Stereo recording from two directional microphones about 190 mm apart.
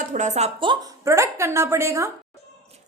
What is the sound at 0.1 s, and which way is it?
A woman's voice, 40° right (ahead or behind).